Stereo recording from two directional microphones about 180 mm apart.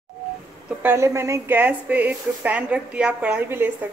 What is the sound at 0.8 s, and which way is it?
Speech, 15° right (ahead or behind).